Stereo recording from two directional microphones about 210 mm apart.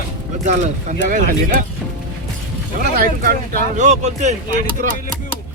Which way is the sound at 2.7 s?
45° right (ahead or behind).